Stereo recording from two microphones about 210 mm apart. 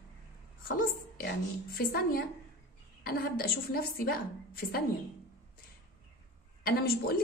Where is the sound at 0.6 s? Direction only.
45° left (ahead or behind).